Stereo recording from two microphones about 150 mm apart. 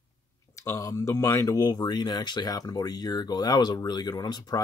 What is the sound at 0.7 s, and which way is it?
Speech, 20° left (ahead or behind).